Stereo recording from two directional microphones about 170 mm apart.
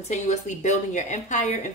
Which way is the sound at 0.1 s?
45° left (ahead or behind).